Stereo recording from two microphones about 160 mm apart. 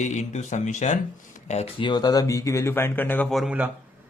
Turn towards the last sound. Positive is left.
turn(degrees=-5)  # may be behind; listen again after turning